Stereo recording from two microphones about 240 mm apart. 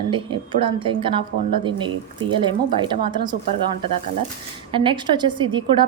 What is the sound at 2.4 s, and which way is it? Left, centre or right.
Speech, centre.